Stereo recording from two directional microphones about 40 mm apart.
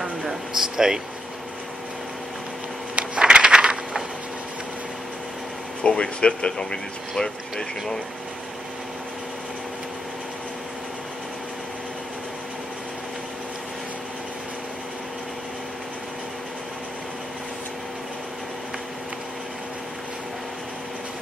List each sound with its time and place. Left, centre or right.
0.2 s air conditioning: centre
3.2 s a sound: right
5.9 s speech: left
7.5 s speech: centre